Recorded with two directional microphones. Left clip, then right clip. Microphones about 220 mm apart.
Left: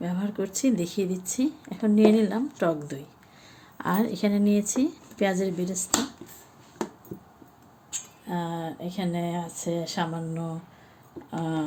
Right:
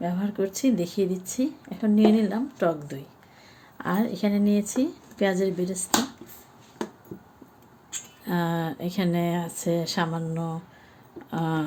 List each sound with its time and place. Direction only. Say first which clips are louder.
0.0 s speech: right 3 dB; centre (ahead or behind)
8.3 s speech: right 4 dB; 25° right (ahead or behind)